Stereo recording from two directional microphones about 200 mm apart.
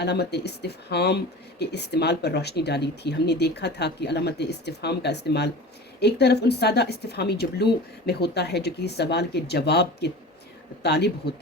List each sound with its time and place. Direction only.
0.0 s speech: 55° left (ahead or behind)